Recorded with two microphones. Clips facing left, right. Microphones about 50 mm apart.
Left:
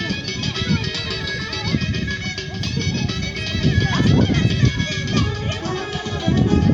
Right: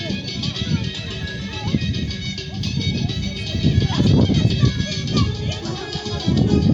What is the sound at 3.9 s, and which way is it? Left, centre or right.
Run, left.